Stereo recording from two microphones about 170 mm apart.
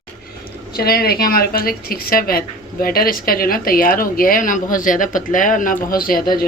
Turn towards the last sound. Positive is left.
turn(degrees=55)  # may be behind; listen again after turning